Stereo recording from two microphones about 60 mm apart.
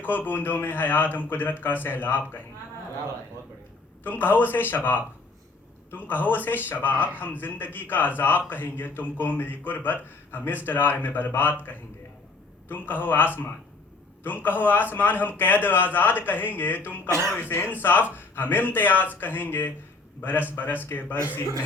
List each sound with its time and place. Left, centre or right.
0.0 s speech: left
4.0 s speech: left
17.1 s speech: right
17.7 s speech: left